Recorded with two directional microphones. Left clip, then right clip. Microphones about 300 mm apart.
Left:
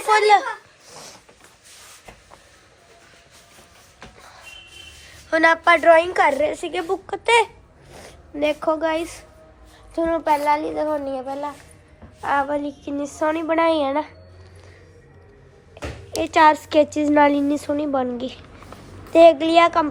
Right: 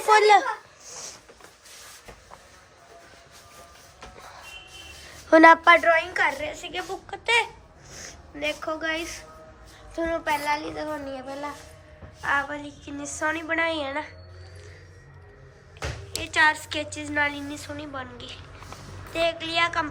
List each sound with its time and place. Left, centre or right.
0.0 s a child's voice: centre
0.9 s a sound: centre
5.3 s a woman's voice: centre
5.8 s a woman's voice: centre
16.2 s a woman's voice: centre